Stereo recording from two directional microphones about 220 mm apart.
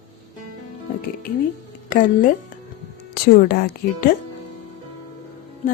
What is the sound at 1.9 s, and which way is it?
A woman's voice, 40° left (ahead or behind).